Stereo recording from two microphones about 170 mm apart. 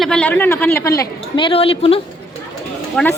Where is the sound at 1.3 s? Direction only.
30° left (ahead or behind).